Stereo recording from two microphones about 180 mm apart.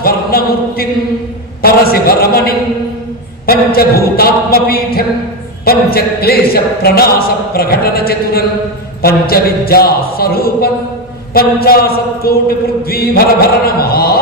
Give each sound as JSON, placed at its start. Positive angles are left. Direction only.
{"t": 0.0, "sound": "a capella", "side_deg": 55}
{"t": 1.6, "sound": "a man's voice", "side_deg": 55}